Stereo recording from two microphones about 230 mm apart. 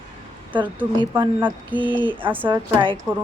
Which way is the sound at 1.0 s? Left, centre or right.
Centre.